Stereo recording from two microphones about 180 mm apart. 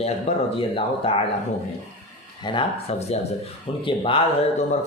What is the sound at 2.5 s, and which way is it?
Speech, 30° left (ahead or behind).